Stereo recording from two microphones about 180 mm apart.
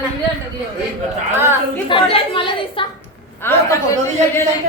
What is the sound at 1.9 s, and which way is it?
Speech, 30° left (ahead or behind).